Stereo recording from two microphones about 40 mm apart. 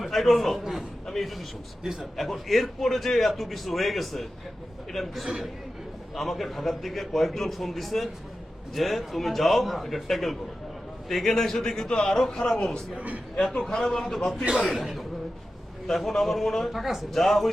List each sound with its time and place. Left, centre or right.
0.0 s a man's voice: centre
1.0 s a sound: centre
1.8 s a man's voice: centre
2.1 s a man's voice: centre
13.5 s a man's voice: left
13.7 s a man's voice: centre